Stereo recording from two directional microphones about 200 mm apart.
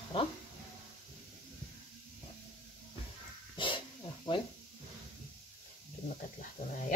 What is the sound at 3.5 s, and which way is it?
Wild animals, 25° left (ahead or behind).